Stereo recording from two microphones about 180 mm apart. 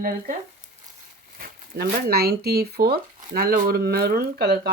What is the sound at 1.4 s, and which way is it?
Speech, 55° right (ahead or behind).